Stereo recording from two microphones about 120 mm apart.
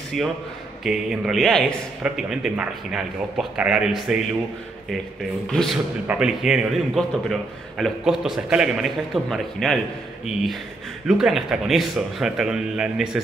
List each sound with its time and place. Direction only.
0.1 s a man's voice: 5° left (ahead or behind)
5.5 s a man's voice: 5° left (ahead or behind)
6.0 s a man's voice: 5° right (ahead or behind)